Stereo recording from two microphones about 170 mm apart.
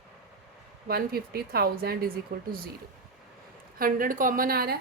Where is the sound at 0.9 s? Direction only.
65° right (ahead or behind).